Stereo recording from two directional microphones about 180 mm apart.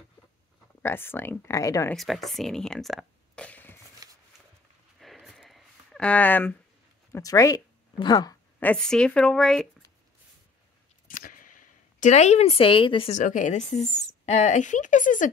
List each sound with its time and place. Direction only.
0.8 s speech: 10° left (ahead or behind)
2.0 s speech: centre (ahead or behind)
4.0 s shuffling cards: 20° right (ahead or behind)
5.0 s a sound: centre (ahead or behind)
7.1 s speech: 20° left (ahead or behind)
8.5 s a woman's voice: 5° left (ahead or behind)
11.1 s a sound: 50° left (ahead or behind); by 13.2 s 30° left (ahead or behind)
13.2 s speech: 45° left (ahead or behind)